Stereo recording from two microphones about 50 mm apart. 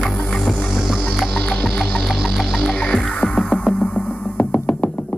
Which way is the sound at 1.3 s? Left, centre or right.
Left.